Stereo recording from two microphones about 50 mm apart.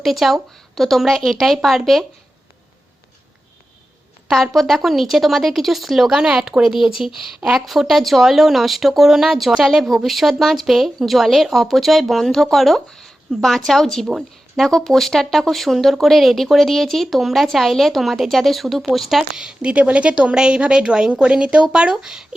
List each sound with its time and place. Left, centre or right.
0.0 s speech: centre
4.3 s speech: centre
6.1 s a woman's voice: centre
19.4 s a woman's voice: centre